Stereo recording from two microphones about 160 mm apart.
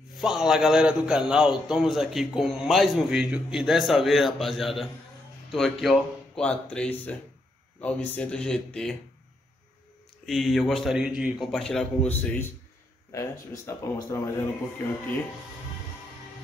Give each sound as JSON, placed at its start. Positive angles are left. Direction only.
{"t": 0.2, "sound": "a man's voice", "side_deg": 0}
{"t": 10.2, "sound": "a man's voice", "side_deg": 0}
{"t": 13.9, "sound": "speech", "side_deg": 15}